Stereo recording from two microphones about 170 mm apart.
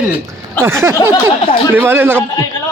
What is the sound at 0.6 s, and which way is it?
Speech, 15° right (ahead or behind).